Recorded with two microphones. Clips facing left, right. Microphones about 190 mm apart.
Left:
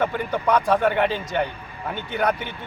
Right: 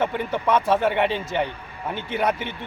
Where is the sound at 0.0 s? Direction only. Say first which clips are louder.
Left 1 dB; centre (ahead or behind).